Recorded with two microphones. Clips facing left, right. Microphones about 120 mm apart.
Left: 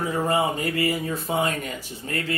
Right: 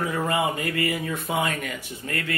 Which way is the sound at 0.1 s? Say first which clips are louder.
Left 2 dB; 35° left (ahead or behind).